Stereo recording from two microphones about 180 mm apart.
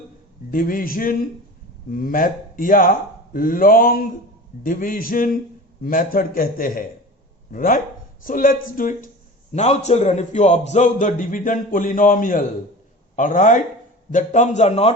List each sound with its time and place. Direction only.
0.5 s a man's voice: 50° left (ahead or behind)
9.5 s a man's voice: 40° left (ahead or behind)